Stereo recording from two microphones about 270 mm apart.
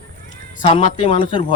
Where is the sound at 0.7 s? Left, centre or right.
Left.